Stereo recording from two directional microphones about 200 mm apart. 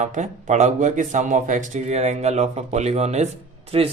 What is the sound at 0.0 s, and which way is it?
Speech, 35° right (ahead or behind).